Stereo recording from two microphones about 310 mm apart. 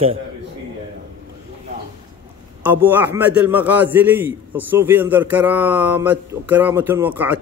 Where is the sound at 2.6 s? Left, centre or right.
Centre.